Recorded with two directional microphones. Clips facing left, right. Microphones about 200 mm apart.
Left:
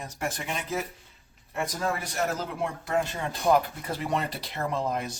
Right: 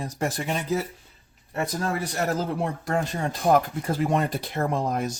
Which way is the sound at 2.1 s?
40° right (ahead or behind).